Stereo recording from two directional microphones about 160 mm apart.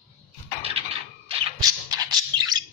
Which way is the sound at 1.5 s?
25° right (ahead or behind).